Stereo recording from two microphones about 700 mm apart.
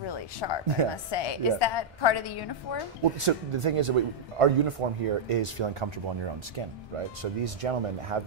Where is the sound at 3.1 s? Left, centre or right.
Right.